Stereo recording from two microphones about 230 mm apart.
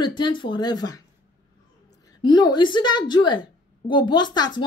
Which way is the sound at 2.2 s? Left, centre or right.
Centre.